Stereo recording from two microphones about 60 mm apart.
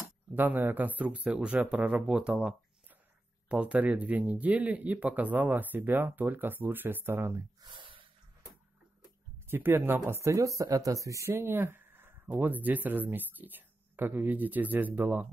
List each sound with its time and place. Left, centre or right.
0.3 s speech: right
7.2 s speech: right
9.5 s speech: right
10.3 s speech: right
11.2 s speech: right